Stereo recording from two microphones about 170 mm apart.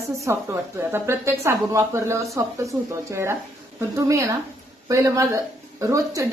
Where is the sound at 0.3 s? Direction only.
15° right (ahead or behind).